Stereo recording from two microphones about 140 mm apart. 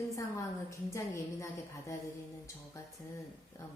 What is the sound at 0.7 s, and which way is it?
Speech, 20° left (ahead or behind).